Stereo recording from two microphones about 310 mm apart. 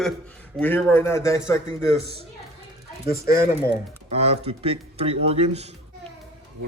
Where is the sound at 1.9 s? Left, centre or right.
Centre.